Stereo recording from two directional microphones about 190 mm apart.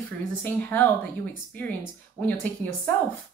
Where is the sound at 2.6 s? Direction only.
10° left (ahead or behind).